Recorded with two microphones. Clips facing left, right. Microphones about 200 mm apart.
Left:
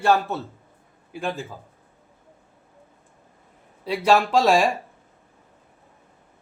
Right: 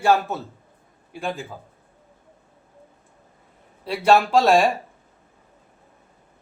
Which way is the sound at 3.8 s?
Centre (ahead or behind).